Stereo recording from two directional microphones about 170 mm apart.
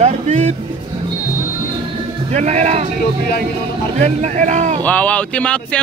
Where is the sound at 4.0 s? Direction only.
45° right (ahead or behind).